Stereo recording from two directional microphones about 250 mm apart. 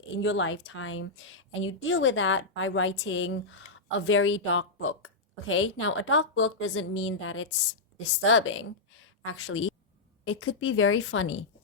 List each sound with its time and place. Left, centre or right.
0.2 s a woman's voice: left